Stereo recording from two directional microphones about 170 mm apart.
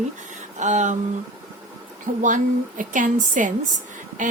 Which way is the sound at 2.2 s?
50° right (ahead or behind).